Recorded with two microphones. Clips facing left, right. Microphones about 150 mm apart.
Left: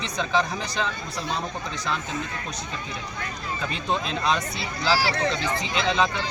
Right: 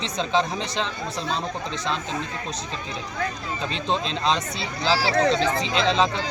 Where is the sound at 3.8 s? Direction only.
25° right (ahead or behind).